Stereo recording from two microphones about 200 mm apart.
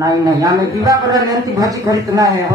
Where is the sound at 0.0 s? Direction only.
15° right (ahead or behind).